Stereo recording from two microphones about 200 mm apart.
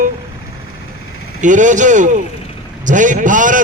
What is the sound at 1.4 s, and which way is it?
A man's voice, 40° right (ahead or behind).